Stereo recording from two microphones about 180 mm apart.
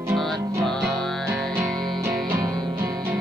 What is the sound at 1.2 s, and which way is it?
Music, 15° right (ahead or behind).